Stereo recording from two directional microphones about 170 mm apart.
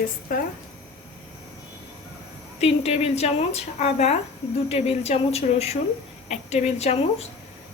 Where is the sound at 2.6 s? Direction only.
35° left (ahead or behind).